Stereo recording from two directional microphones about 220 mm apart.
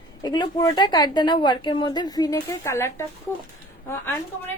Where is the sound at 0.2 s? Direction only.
20° left (ahead or behind).